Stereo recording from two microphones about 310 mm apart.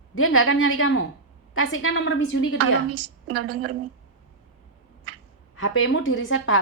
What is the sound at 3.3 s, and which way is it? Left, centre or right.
Speech, right.